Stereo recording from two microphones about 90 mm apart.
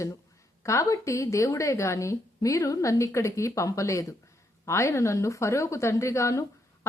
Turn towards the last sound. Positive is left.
turn(degrees=35)  # may be behind; listen again after turning